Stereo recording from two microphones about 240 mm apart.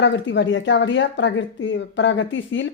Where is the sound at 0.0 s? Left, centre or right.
Left.